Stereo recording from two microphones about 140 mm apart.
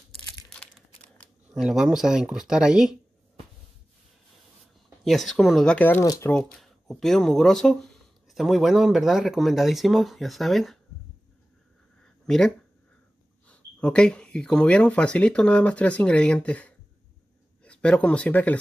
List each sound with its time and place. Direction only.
0.5 s crumpling: 10° left (ahead or behind)
1.6 s speech: 5° right (ahead or behind)
5.0 s speech: centre (ahead or behind)
6.0 s speech: 25° left (ahead or behind)
6.3 s speech: centre (ahead or behind)
12.0 s a sound: 5° left (ahead or behind)
13.5 s speech: 10° left (ahead or behind)